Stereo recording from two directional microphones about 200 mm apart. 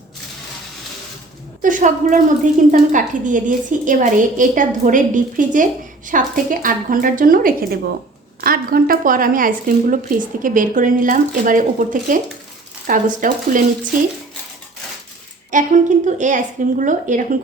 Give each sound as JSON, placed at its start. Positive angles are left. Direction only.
{"t": 1.6, "sound": "a woman's voice", "side_deg": -40}
{"t": 15.4, "sound": "a woman's voice", "side_deg": -40}